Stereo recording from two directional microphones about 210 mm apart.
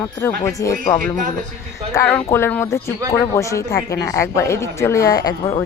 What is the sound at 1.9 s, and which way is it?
Speech, 10° left (ahead or behind).